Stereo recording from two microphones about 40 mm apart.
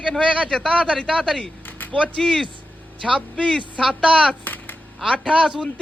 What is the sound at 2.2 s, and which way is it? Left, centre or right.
Speech, centre.